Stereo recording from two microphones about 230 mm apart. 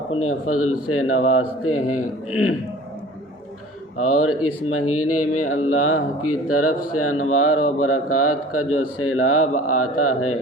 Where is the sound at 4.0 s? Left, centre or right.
Left.